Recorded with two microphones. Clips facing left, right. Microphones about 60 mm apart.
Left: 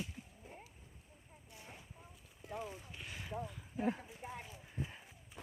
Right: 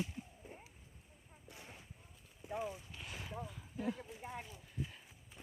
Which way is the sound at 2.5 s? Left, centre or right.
Centre.